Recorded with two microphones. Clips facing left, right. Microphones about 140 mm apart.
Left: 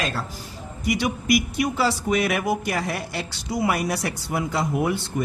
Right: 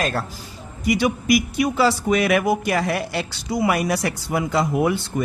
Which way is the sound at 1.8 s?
90° right.